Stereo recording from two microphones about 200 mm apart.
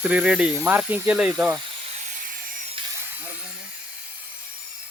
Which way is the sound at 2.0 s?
40° right (ahead or behind).